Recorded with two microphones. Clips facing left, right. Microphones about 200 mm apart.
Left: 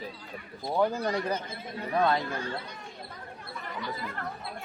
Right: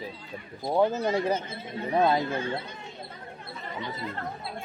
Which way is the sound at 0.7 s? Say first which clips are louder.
Right 3 dB; 20° right (ahead or behind).